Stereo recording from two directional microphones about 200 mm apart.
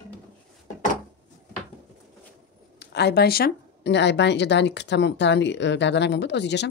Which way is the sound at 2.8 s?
55° left (ahead or behind).